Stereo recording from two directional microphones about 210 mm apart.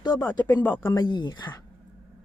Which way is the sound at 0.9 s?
20° left (ahead or behind).